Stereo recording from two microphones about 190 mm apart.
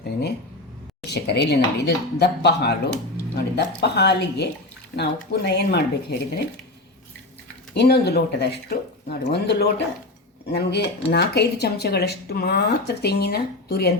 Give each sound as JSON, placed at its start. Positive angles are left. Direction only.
{"t": 1.0, "sound": "speech", "side_deg": 60}
{"t": 3.8, "sound": "speech", "side_deg": 60}
{"t": 7.7, "sound": "speech", "side_deg": 60}